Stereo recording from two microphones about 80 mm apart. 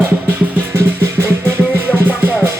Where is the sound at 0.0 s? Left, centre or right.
Right.